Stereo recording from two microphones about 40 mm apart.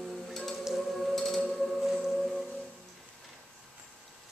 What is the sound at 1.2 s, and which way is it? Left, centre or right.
Music, centre.